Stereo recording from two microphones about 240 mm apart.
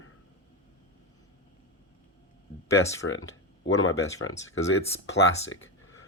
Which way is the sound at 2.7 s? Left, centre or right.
Centre.